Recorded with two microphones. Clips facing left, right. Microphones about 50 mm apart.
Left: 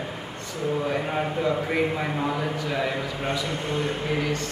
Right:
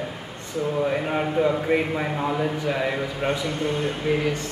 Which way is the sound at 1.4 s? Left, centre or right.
Right.